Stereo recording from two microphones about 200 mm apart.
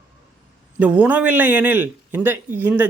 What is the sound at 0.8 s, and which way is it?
A man's voice, 5° right (ahead or behind).